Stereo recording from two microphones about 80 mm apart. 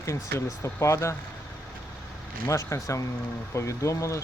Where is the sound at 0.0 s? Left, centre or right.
Left.